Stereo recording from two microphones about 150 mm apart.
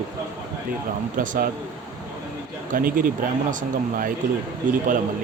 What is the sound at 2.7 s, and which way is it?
Speech, 70° right (ahead or behind).